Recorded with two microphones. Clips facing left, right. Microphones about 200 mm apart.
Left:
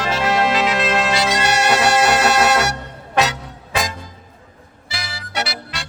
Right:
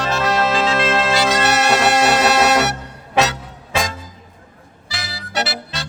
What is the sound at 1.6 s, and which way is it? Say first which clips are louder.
Music: left 1 dB; centre (ahead or behind).